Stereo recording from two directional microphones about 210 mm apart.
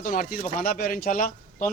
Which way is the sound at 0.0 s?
45° left (ahead or behind).